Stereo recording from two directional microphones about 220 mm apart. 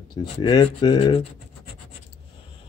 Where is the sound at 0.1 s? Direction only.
20° left (ahead or behind).